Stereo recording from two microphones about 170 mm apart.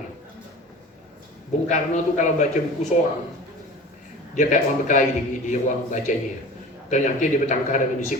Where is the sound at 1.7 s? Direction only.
45° left (ahead or behind).